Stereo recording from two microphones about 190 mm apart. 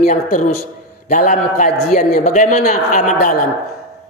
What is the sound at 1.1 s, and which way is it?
A man's voice, 45° left (ahead or behind).